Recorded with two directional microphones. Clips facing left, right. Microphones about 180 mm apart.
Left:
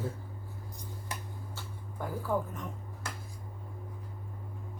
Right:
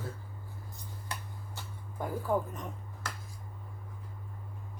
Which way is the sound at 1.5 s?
15° right (ahead or behind).